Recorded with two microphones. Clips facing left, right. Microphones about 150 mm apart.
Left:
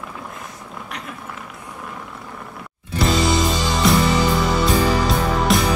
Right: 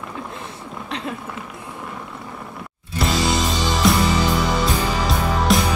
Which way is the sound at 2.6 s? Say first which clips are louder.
Left 2 dB; centre (ahead or behind).